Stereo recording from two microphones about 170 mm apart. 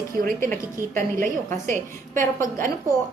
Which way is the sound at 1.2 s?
50° right (ahead or behind).